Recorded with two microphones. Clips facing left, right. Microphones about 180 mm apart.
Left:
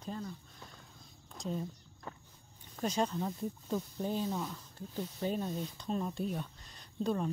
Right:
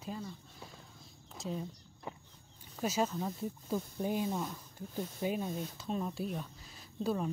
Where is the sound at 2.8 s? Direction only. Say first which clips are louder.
Even; 5° right (ahead or behind).